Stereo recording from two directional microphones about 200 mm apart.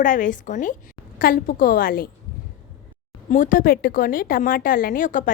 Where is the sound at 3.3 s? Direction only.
40° left (ahead or behind).